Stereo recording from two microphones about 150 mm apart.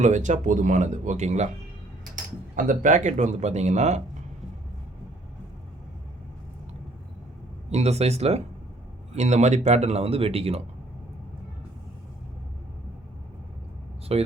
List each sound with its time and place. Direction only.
0.0 s speech: 55° right (ahead or behind)
2.6 s speech: 60° right (ahead or behind)
7.7 s speech: 45° right (ahead or behind)
14.1 s speech: 40° right (ahead or behind)